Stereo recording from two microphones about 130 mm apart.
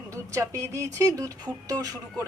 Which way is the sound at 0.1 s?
25° right (ahead or behind).